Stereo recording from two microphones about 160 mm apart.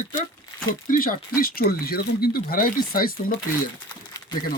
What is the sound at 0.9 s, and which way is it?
Speech, 60° left (ahead or behind).